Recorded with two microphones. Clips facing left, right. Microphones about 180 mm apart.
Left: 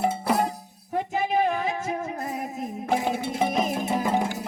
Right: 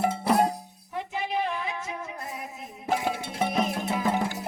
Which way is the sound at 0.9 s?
45° left (ahead or behind).